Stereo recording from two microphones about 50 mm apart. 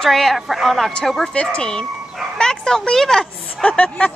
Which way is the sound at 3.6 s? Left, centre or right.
Left.